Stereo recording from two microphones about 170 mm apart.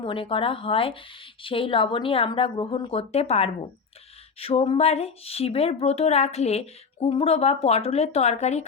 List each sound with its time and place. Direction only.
0.0 s speech: 30° left (ahead or behind)